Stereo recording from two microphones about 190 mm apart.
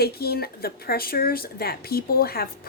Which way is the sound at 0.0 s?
55° left (ahead or behind).